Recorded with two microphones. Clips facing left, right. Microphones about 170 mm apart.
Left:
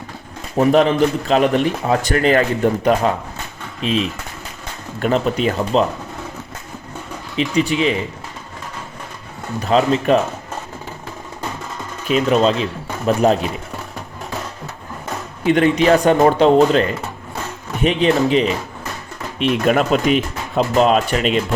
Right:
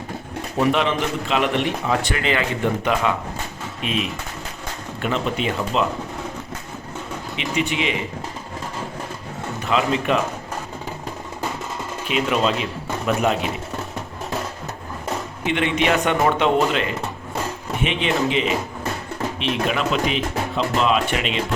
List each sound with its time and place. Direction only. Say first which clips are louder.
0.5 s a man's voice: left 6 dB; 40° left (ahead or behind)
7.3 s a man's voice: left 6 dB; 35° left (ahead or behind)
9.6 s speech: left 6 dB; 35° left (ahead or behind)
12.0 s a man's voice: left 6 dB; 40° left (ahead or behind)
15.4 s a man's voice: left 7 dB; 40° left (ahead or behind)
17.8 s a man's voice: left 7 dB; 40° left (ahead or behind)